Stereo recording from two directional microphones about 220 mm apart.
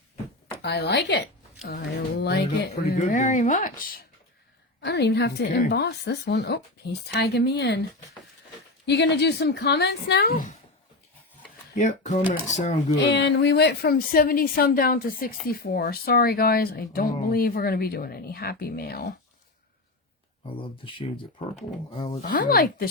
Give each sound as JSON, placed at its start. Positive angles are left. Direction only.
{"t": 0.6, "sound": "speech", "side_deg": 50}
{"t": 4.8, "sound": "speech", "side_deg": 50}
{"t": 8.9, "sound": "speech", "side_deg": 50}
{"t": 11.7, "sound": "speech", "side_deg": 35}
{"t": 13.0, "sound": "speech", "side_deg": 50}
{"t": 20.4, "sound": "speech", "side_deg": 25}
{"t": 22.2, "sound": "speech", "side_deg": 40}